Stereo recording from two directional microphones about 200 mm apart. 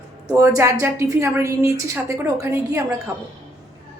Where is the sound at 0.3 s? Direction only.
15° right (ahead or behind).